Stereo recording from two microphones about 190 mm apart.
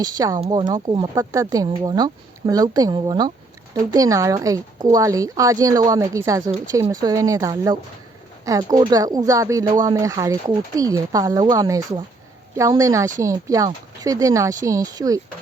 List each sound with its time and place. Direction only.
0.0 s speech: 20° right (ahead or behind)